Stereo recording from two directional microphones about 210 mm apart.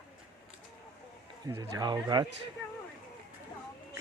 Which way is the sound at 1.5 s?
20° right (ahead or behind).